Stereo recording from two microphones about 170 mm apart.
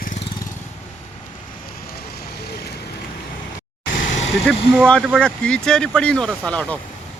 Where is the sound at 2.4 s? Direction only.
70° left (ahead or behind).